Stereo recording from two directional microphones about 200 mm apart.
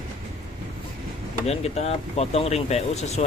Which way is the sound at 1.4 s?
30° left (ahead or behind).